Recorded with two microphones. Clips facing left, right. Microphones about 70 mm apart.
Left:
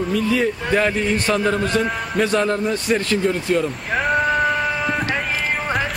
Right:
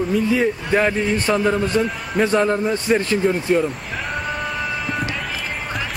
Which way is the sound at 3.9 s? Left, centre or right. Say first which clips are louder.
Left 7 dB; left.